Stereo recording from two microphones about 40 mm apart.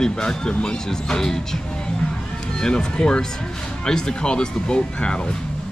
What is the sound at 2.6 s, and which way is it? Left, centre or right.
Speech, centre.